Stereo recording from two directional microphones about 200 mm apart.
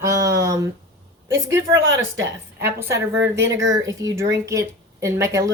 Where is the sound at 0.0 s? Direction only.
15° right (ahead or behind).